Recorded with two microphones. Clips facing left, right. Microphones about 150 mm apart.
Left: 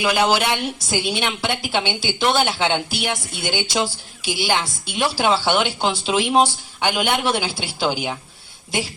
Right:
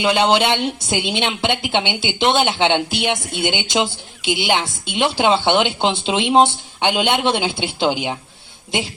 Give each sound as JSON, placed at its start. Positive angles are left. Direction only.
{"t": 0.0, "sound": "a woman's voice", "side_deg": -25}